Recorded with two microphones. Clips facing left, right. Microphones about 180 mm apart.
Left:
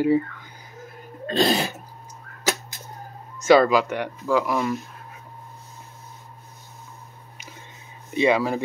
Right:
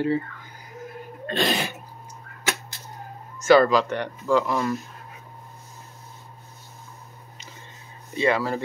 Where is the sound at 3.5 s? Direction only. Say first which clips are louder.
Left 1 dB; 10° left (ahead or behind).